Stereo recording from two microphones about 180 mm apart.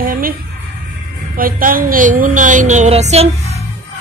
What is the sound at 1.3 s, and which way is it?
Speech, 50° right (ahead or behind).